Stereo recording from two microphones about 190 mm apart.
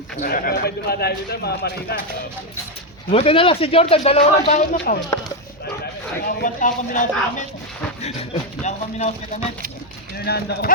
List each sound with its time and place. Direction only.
0.2 s a man's voice: 45° left (ahead or behind)
3.1 s speech: 30° left (ahead or behind)
5.8 s a sound: 45° left (ahead or behind)
8.0 s speech: 35° left (ahead or behind)
10.2 s a man's voice: 55° left (ahead or behind)